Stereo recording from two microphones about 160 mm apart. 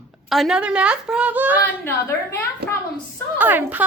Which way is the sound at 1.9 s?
15° left (ahead or behind).